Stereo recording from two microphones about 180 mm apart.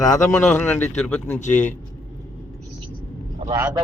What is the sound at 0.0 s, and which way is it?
Speech, 20° left (ahead or behind).